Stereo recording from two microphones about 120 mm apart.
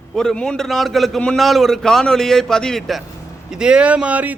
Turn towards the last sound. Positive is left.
turn(degrees=-10)  # may be behind; listen again after turning